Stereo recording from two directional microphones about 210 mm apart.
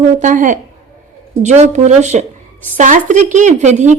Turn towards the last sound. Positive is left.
turn(degrees=-35)  # may be behind; listen again after turning